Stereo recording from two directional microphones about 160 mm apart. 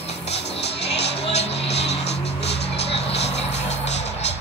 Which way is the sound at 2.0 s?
90° left.